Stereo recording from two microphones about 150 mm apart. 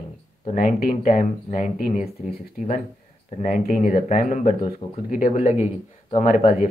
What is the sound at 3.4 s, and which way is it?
Speech, 60° left (ahead or behind).